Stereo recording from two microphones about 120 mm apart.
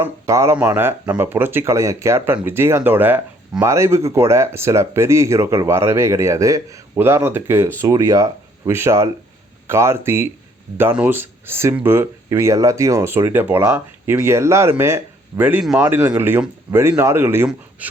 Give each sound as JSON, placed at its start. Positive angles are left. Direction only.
{"t": 0.0, "sound": "speech", "side_deg": -25}